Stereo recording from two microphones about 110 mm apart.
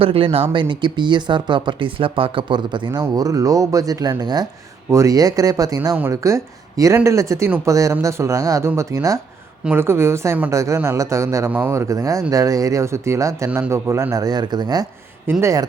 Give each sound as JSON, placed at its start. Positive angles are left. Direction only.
{"t": 0.0, "sound": "speech", "side_deg": -60}
{"t": 0.5, "sound": "speech", "side_deg": -45}
{"t": 3.0, "sound": "speech", "side_deg": -30}
{"t": 15.3, "sound": "speech", "side_deg": -25}